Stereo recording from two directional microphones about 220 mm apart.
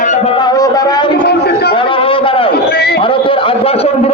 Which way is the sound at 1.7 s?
25° left (ahead or behind).